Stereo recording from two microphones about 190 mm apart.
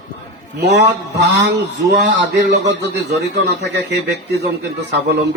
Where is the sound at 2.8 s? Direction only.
60° right (ahead or behind).